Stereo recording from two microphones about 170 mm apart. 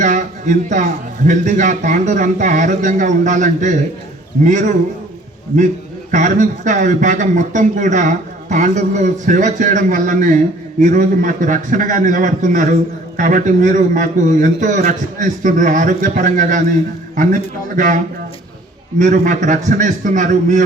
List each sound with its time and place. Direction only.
0.0 s a sound: 45° right (ahead or behind)
1.3 s a man's voice: 45° right (ahead or behind)
6.1 s a man's voice: 50° right (ahead or behind)
18.9 s a man's voice: 45° right (ahead or behind)